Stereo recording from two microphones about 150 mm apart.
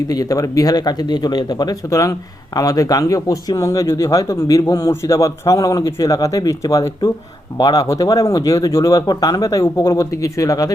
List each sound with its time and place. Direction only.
0.1 s speech: 25° left (ahead or behind)